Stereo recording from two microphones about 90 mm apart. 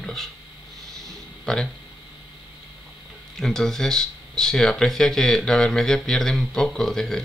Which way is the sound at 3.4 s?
5° left (ahead or behind).